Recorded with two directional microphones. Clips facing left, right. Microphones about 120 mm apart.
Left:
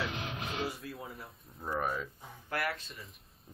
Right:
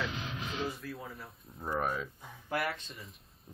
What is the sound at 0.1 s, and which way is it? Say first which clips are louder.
Music: left 1 dB; 55° left (ahead or behind).